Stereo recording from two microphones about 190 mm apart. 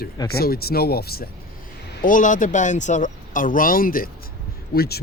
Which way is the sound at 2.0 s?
45° left (ahead or behind).